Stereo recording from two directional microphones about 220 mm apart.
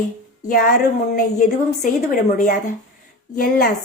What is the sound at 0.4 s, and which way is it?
A woman's voice, 40° left (ahead or behind).